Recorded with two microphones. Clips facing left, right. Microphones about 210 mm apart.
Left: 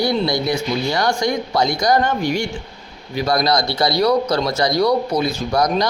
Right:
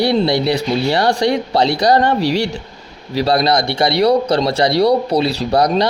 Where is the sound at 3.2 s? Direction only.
30° right (ahead or behind).